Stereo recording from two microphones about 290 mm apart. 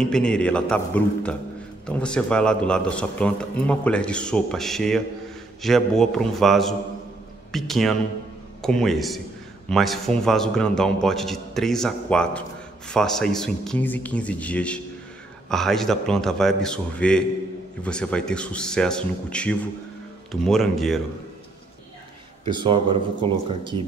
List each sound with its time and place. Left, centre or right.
0.0 s a man's voice: centre
22.4 s speech: centre